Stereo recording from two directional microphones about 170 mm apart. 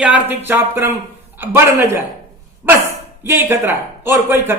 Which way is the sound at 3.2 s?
15° right (ahead or behind).